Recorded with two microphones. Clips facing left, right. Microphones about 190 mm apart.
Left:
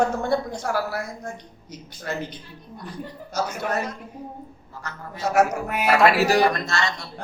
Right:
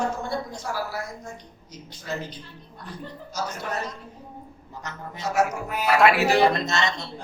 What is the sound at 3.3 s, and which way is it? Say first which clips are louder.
Speech: left 4 dB; 55° left (ahead or behind).